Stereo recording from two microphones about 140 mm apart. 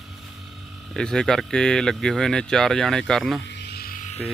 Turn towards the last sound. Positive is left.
turn(degrees=85)